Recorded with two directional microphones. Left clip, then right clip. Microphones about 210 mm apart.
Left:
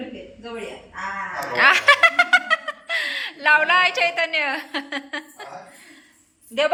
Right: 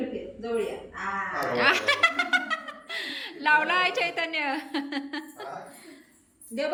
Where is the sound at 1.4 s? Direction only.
5° right (ahead or behind).